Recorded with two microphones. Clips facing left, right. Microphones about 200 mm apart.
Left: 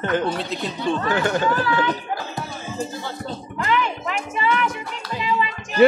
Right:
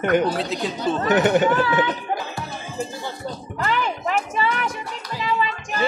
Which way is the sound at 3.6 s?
40° right (ahead or behind).